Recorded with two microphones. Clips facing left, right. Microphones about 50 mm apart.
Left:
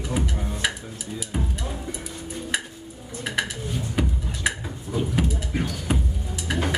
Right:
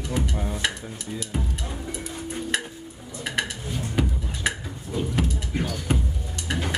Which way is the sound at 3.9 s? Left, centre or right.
Centre.